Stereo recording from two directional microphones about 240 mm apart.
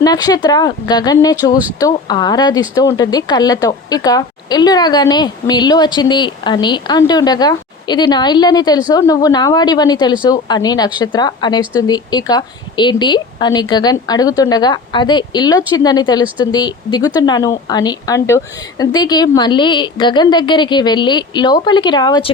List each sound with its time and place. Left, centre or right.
0.0 s speech: centre